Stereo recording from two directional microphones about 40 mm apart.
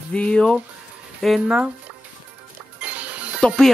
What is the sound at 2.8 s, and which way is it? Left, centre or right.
Music, right.